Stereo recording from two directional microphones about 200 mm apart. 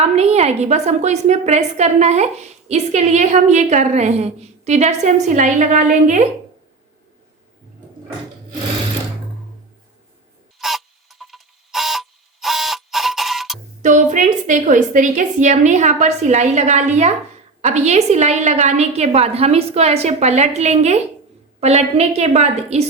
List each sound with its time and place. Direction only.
0.0 s a woman's voice: 30° right (ahead or behind)
10.6 s clock: centre (ahead or behind)
13.8 s a woman's voice: 40° right (ahead or behind)